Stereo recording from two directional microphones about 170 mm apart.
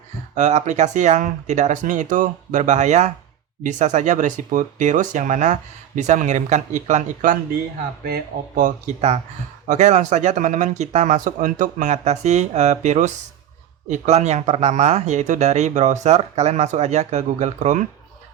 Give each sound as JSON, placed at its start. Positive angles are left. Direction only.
{"t": 0.3, "sound": "speech", "side_deg": -45}